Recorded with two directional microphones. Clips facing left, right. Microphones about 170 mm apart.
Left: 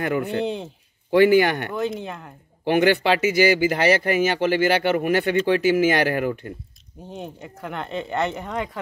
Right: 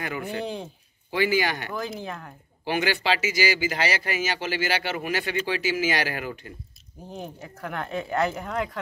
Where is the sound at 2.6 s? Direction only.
60° left (ahead or behind).